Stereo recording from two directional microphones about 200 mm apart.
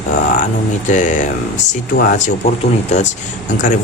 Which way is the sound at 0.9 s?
40° left (ahead or behind).